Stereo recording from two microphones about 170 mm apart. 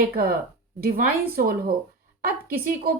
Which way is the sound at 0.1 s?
60° right (ahead or behind).